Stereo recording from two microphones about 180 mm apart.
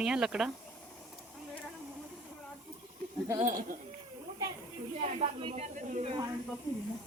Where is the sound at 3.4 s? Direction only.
50° right (ahead or behind).